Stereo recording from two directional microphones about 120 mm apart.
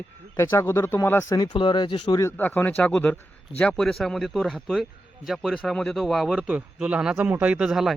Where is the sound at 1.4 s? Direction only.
40° left (ahead or behind).